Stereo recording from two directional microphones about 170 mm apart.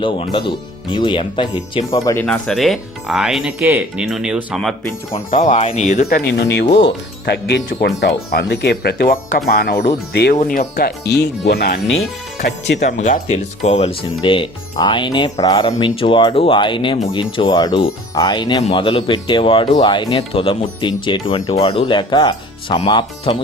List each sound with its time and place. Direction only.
0.0 s speech: 30° left (ahead or behind)
2.2 s speech: centre (ahead or behind)
3.6 s speech: 15° right (ahead or behind)
4.0 s speech: 5° right (ahead or behind)
5.3 s speech: 50° left (ahead or behind)
6.1 s speech: 75° left (ahead or behind)
10.4 s speech: 55° left (ahead or behind)
12.4 s speech: 90° left
12.8 s speech: 45° left (ahead or behind); by 23.4 s 25° left (ahead or behind)